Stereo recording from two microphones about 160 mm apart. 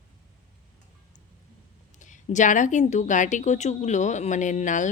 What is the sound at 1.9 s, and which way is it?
A woman's voice, 50° left (ahead or behind).